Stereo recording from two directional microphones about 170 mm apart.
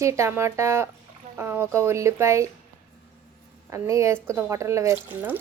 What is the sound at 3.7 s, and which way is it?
Speech, 15° right (ahead or behind).